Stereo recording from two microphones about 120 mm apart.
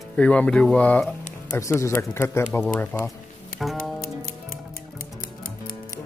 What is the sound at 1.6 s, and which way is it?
Speech, 25° left (ahead or behind).